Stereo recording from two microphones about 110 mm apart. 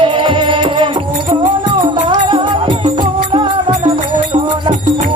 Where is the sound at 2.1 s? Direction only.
45° right (ahead or behind).